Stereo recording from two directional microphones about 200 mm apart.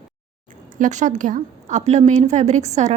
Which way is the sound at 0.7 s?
40° right (ahead or behind).